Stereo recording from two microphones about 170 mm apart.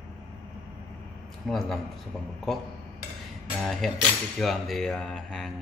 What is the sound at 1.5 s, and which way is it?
Cutlery, centre (ahead or behind).